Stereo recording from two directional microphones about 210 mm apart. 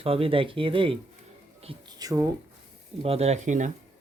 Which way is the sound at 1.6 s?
20° right (ahead or behind).